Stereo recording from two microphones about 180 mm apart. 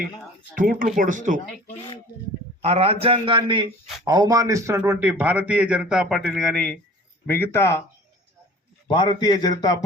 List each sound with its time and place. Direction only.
0.5 s speech: 50° right (ahead or behind)
2.6 s a man's voice: 35° right (ahead or behind); by 7.8 s 15° left (ahead or behind)
8.9 s speech: 25° left (ahead or behind)